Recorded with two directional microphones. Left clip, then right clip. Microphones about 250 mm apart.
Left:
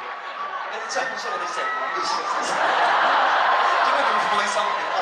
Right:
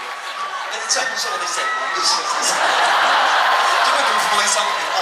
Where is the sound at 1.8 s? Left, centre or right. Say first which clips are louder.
Right 5 dB; centre.